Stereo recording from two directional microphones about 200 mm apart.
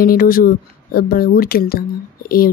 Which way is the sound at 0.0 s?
45° left (ahead or behind).